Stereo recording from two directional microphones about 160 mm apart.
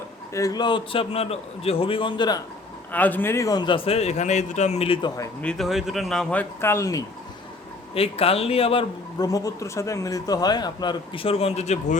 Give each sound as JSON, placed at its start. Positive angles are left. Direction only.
{"t": 0.3, "sound": "a man's voice", "side_deg": 25}
{"t": 2.9, "sound": "a man's voice", "side_deg": 10}
{"t": 5.4, "sound": "speech", "side_deg": 5}
{"t": 7.9, "sound": "a man's voice", "side_deg": 40}